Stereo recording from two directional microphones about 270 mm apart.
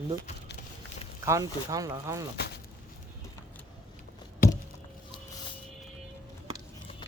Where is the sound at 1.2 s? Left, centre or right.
Centre.